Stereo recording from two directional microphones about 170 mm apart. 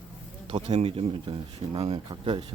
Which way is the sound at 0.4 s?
35° right (ahead or behind).